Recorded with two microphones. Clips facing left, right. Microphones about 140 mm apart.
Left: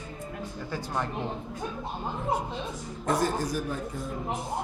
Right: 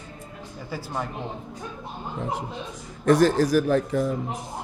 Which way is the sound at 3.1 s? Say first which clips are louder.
Right 9 dB; 90° right.